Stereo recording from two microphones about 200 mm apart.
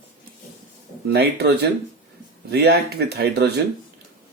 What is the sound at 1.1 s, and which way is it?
Speech, 55° right (ahead or behind).